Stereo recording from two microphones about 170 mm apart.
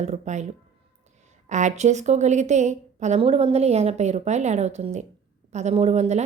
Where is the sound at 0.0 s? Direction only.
40° right (ahead or behind).